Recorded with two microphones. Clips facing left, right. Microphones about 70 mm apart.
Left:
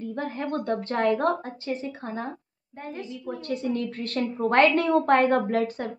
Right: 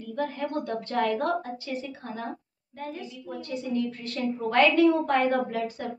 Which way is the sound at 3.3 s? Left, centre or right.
Left.